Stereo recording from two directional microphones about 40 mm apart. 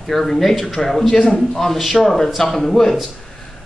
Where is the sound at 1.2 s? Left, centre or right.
Centre.